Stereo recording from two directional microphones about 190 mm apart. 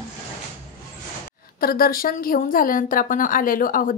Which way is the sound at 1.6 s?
50° left (ahead or behind).